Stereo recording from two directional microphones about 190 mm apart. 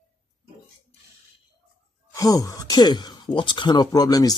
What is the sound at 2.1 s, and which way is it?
Speech, 20° left (ahead or behind).